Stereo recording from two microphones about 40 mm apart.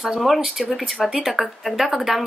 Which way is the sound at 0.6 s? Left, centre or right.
Left.